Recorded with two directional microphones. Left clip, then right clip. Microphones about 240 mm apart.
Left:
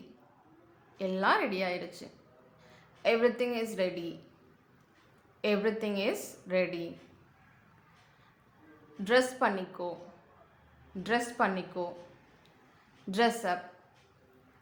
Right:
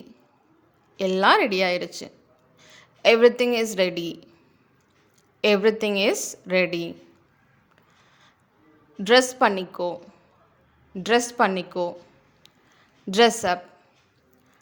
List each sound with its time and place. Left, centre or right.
0.9 s a woman's voice: right
5.4 s a woman's voice: right
9.0 s a woman's voice: right
11.0 s a woman's voice: right
13.1 s a woman's voice: right